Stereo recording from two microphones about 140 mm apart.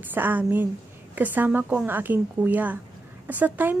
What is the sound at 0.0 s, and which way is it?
Speech, 15° right (ahead or behind).